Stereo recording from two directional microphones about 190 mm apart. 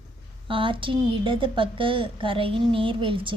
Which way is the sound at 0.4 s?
25° right (ahead or behind).